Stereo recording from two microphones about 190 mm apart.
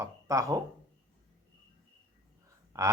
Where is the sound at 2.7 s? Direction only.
15° right (ahead or behind).